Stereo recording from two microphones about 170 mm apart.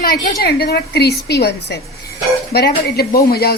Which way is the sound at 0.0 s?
60° left (ahead or behind).